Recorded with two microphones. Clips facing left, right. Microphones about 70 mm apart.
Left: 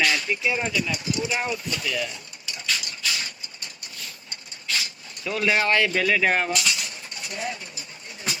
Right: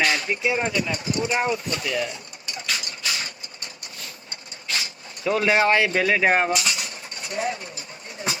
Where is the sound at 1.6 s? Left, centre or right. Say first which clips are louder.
Right 2 dB; right.